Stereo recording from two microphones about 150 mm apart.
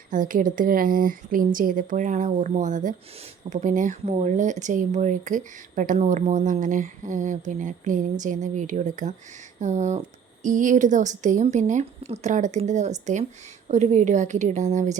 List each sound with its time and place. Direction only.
0.1 s a woman's voice: 60° right (ahead or behind)